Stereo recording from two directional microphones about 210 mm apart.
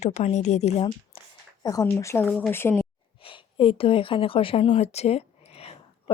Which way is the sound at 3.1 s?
25° left (ahead or behind).